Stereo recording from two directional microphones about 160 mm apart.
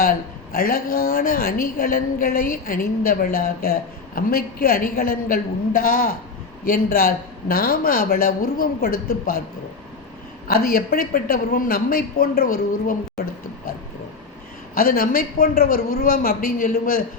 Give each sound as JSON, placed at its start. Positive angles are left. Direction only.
{"t": 0.5, "sound": "a woman's voice", "side_deg": 65}
{"t": 10.5, "sound": "a woman's voice", "side_deg": 70}
{"t": 14.8, "sound": "a woman's voice", "side_deg": 65}